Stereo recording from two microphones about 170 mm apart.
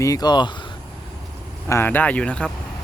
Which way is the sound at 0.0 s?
20° left (ahead or behind).